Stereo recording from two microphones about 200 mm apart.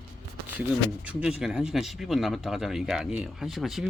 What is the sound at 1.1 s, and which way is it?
Speech, 5° right (ahead or behind).